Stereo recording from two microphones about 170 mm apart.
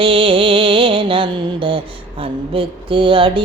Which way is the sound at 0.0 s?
30° right (ahead or behind).